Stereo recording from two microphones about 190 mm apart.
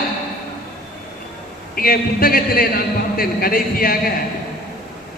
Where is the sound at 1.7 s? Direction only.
50° left (ahead or behind).